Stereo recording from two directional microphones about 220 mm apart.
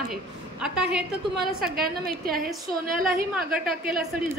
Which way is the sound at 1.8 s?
40° right (ahead or behind).